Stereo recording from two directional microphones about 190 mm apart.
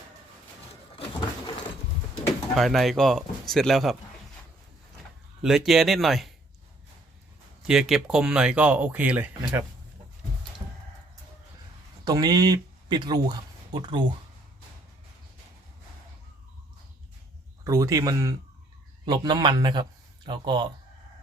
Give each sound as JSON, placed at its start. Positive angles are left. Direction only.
{"t": 2.6, "sound": "speech", "side_deg": 0}
{"t": 5.4, "sound": "speech", "side_deg": 0}
{"t": 7.7, "sound": "speech", "side_deg": 0}
{"t": 12.0, "sound": "speech", "side_deg": -20}
{"t": 17.6, "sound": "speech", "side_deg": -15}